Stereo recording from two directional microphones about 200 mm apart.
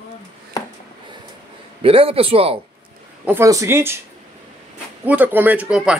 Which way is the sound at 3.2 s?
15° right (ahead or behind).